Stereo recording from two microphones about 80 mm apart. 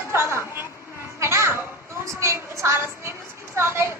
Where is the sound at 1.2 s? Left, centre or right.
Right.